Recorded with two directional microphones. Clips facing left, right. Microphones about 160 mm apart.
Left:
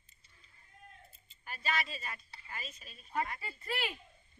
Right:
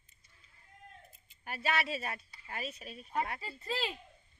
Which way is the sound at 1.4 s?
65° right (ahead or behind).